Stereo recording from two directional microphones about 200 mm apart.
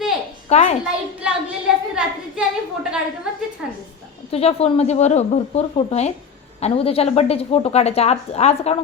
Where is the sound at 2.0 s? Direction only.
5° right (ahead or behind).